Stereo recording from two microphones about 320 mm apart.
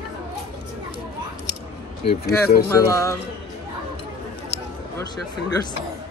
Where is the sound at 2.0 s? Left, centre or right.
Centre.